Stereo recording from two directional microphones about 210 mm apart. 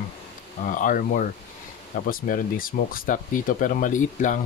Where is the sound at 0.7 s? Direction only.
40° left (ahead or behind).